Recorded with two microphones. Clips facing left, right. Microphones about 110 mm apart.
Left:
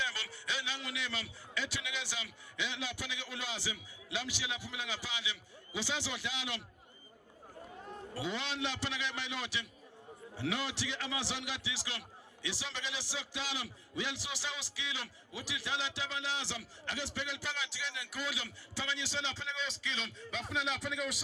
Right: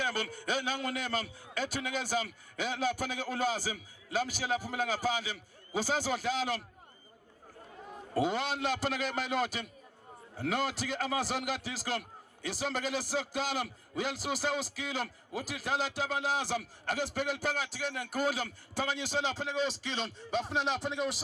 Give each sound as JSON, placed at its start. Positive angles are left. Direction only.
{"t": 0.0, "sound": "a man's voice", "side_deg": -50}
{"t": 8.1, "sound": "a man's voice", "side_deg": -50}